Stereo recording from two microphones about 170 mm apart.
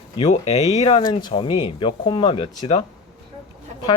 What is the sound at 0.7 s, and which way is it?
Speech, 35° left (ahead or behind).